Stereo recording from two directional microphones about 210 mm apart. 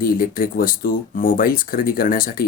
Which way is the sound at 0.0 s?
45° left (ahead or behind).